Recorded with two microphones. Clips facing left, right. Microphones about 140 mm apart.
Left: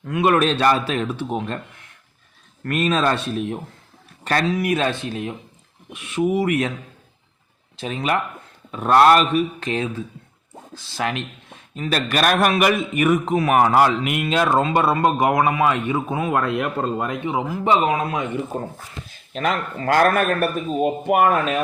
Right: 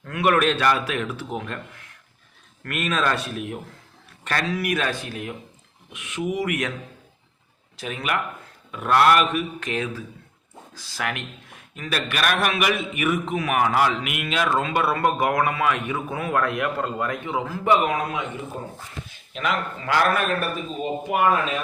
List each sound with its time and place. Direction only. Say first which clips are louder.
0.0 s speech: left 3 dB; 20° left (ahead or behind)
2.6 s a man's voice: left 5 dB; 35° left (ahead or behind)
7.8 s a man's voice: left 4 dB; 30° left (ahead or behind)
14.0 s speech: left 5 dB; 30° left (ahead or behind)
18.5 s a man's voice: left 6 dB; 50° left (ahead or behind)
19.3 s a man's voice: left 3 dB; 40° left (ahead or behind)